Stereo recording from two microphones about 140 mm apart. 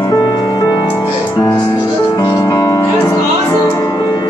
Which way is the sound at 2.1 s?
25° left (ahead or behind).